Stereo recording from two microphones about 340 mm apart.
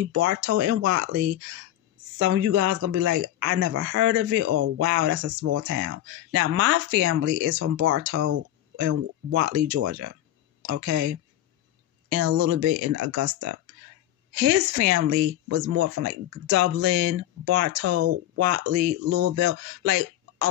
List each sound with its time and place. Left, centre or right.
0.1 s speech: right
4.8 s speech: right
7.5 s speech: right
8.3 s speech: right
10.9 s speech: right
15.5 s speech: right
16.1 s speech: right
17.8 s speech: right
19.0 s speech: right
19.4 s speech: right